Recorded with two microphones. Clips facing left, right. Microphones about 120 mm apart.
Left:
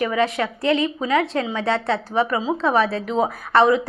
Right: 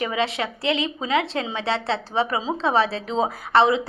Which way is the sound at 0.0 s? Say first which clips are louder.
Left 4 dB; 25° right (ahead or behind).